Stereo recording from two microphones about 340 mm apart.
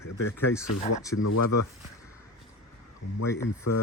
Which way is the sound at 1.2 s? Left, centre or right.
Left.